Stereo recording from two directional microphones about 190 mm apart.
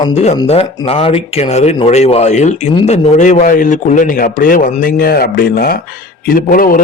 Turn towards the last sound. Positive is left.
turn(degrees=45)  # may be behind; listen again after turning